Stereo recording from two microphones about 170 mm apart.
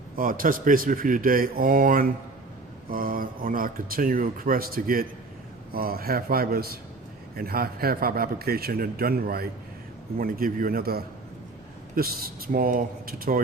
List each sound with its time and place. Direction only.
0.2 s speech: 55° right (ahead or behind)